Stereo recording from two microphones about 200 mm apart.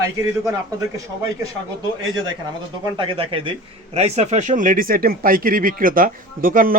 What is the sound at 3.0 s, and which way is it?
A man's voice, 25° right (ahead or behind).